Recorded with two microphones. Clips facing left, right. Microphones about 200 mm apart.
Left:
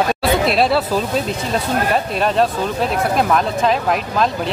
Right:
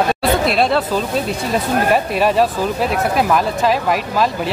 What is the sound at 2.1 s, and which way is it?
Speech, 10° right (ahead or behind).